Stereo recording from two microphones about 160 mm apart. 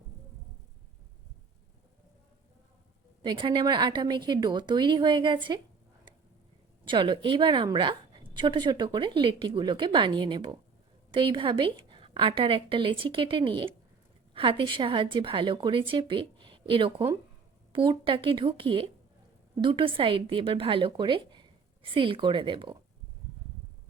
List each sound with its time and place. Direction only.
3.2 s a woman's voice: 30° right (ahead or behind)
6.8 s a woman's voice: 30° right (ahead or behind)